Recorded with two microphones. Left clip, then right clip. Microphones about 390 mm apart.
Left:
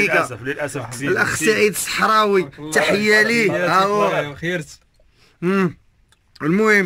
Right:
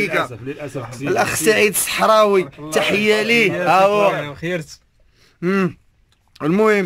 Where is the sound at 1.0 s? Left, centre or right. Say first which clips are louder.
Right 1 dB; centre.